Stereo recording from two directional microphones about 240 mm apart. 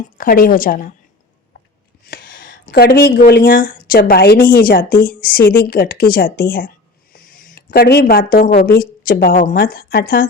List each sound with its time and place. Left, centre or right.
0.2 s speech: left
2.0 s a sound: left
2.4 s speech: left